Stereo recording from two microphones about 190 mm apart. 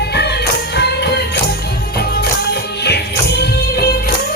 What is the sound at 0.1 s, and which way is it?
Music, 60° left (ahead or behind).